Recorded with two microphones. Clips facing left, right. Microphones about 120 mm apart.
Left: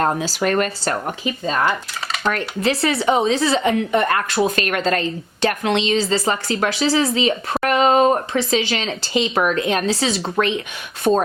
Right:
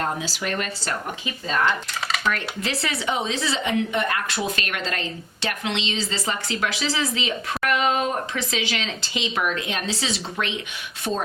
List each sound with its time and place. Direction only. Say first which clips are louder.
0.0 s speech: left 8 dB; 45° left (ahead or behind)
2.2 s a woman's voice: left 9 dB; 35° left (ahead or behind); by 11.2 s 55° left (ahead or behind)